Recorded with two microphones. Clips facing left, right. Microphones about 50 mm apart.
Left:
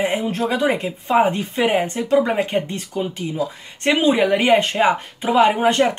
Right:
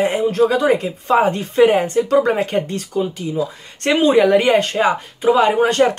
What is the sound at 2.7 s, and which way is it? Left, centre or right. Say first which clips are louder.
Speech: right 4 dB; left.